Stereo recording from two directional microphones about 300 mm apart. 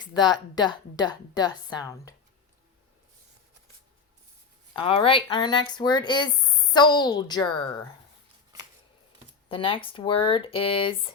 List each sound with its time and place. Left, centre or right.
0.0 s a woman's voice: centre
4.7 s a woman's voice: centre
9.5 s a woman's voice: centre